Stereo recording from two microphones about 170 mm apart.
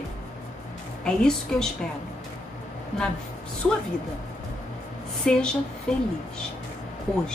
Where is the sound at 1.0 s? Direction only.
5° left (ahead or behind).